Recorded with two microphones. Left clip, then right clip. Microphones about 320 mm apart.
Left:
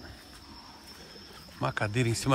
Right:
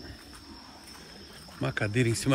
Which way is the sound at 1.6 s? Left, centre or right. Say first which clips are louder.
Right 1 dB; centre.